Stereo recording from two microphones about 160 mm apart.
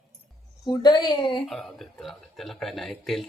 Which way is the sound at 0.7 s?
25° left (ahead or behind).